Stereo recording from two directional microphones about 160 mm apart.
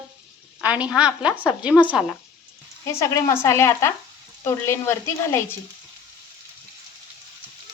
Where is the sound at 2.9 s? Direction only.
15° left (ahead or behind).